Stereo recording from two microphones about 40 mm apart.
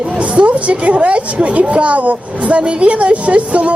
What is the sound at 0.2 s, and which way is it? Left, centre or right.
A woman's voice, right.